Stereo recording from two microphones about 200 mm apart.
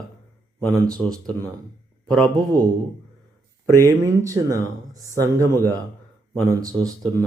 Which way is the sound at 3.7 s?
15° right (ahead or behind).